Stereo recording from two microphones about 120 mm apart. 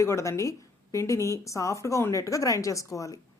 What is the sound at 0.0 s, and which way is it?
Speech, 25° left (ahead or behind).